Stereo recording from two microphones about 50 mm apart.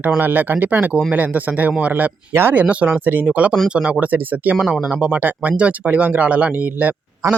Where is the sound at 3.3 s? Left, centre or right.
Right.